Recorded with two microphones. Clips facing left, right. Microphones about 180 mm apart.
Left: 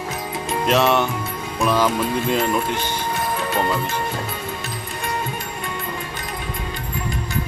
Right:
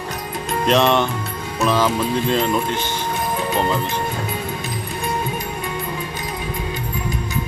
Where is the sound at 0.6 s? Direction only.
5° left (ahead or behind).